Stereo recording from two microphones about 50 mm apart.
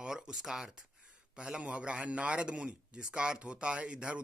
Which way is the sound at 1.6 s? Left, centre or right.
Right.